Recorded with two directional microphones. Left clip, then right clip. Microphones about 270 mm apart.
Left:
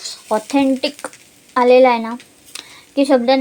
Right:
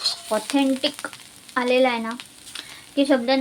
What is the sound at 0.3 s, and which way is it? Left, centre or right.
A woman's voice, centre.